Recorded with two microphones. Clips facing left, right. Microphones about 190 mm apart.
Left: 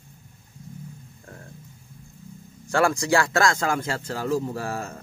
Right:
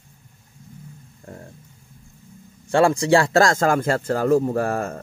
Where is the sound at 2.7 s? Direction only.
25° right (ahead or behind); by 5.0 s 55° right (ahead or behind).